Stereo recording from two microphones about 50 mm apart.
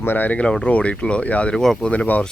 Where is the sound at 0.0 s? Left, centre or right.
Left.